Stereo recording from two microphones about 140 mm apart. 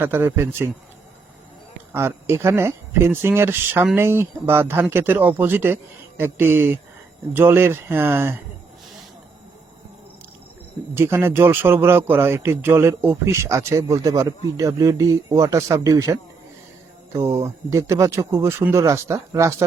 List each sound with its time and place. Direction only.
0.0 s speech: 15° right (ahead or behind)
1.9 s speech: 15° right (ahead or behind)
10.9 s speech: 15° right (ahead or behind)
17.2 s speech: 20° right (ahead or behind)